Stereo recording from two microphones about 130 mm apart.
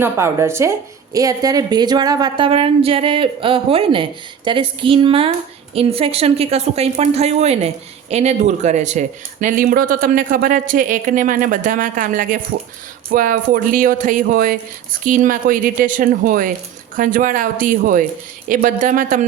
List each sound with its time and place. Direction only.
0.0 s a woman's voice: 20° right (ahead or behind); by 19.2 s 90° right